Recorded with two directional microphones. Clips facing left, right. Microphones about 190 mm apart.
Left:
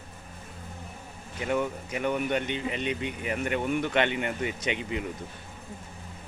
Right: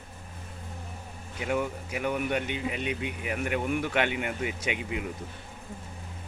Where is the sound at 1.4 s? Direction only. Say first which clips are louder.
Left 1 dB; 5° right (ahead or behind).